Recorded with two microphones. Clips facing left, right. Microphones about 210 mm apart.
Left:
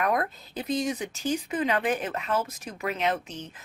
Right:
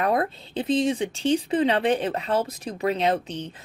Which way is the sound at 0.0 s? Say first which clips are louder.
Right 3 dB; 30° right (ahead or behind).